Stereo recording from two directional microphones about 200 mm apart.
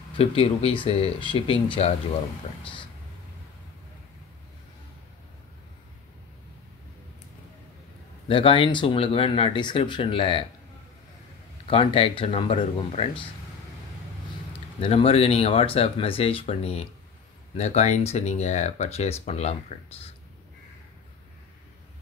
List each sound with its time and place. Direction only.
0.2 s speech: 30° left (ahead or behind)
8.3 s speech: 25° left (ahead or behind)
11.6 s speech: 25° left (ahead or behind)
14.8 s speech: 30° left (ahead or behind)